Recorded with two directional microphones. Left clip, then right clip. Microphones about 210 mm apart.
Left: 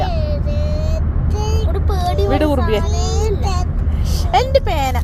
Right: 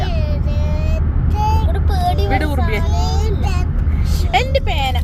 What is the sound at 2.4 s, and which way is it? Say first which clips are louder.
Speech: left 5 dB; 15° left (ahead or behind).